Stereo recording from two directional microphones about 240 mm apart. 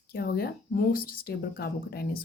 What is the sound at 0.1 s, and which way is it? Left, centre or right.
Speech, left.